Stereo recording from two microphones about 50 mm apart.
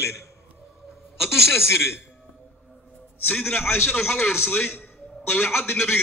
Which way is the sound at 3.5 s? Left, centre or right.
Left.